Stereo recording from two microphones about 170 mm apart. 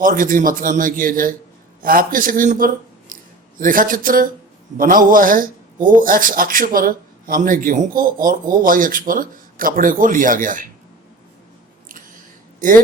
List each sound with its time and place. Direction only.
0.0 s a man's voice: 55° right (ahead or behind)
12.6 s a woman's voice: 50° right (ahead or behind)